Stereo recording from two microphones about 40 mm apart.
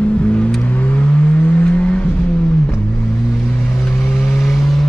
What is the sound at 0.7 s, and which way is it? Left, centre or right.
Vehicle, left.